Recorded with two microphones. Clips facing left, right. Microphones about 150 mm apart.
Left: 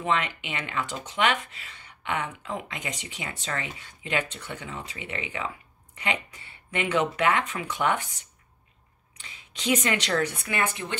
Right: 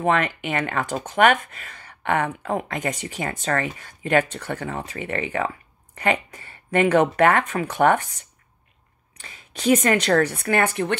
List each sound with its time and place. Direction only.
0.0 s speech: 50° right (ahead or behind)
9.2 s speech: 50° right (ahead or behind)